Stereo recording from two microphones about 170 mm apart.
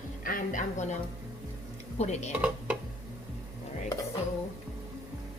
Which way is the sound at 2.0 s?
40° left (ahead or behind).